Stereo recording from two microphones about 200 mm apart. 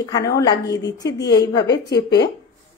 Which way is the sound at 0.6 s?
60° left (ahead or behind).